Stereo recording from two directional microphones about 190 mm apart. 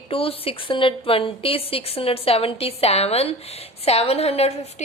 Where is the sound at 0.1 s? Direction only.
30° left (ahead or behind).